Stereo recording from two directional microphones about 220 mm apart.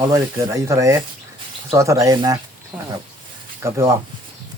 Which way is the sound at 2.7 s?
5° right (ahead or behind).